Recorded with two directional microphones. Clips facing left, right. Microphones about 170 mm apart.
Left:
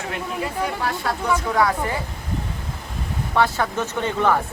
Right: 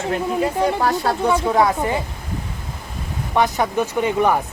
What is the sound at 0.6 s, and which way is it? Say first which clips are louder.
Speech: right 5 dB; 40° right (ahead or behind).